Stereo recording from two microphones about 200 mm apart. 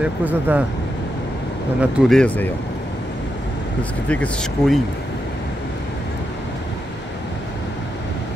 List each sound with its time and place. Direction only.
0.0 s speech: 10° right (ahead or behind)
1.8 s speech: centre (ahead or behind)
4.1 s speech: 5° left (ahead or behind)